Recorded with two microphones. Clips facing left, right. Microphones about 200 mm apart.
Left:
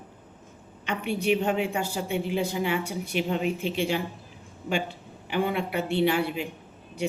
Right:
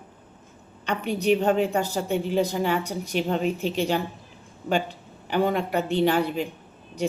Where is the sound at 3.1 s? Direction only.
40° right (ahead or behind).